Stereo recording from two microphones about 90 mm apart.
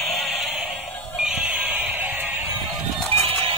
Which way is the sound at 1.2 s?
10° right (ahead or behind).